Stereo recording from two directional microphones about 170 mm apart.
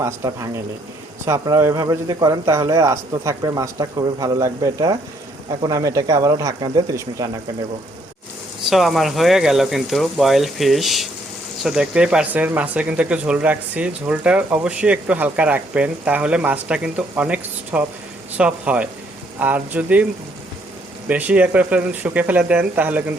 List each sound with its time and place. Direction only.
0.0 s speech: 15° right (ahead or behind)
8.7 s speech: centre (ahead or behind)
21.1 s speech: 10° right (ahead or behind)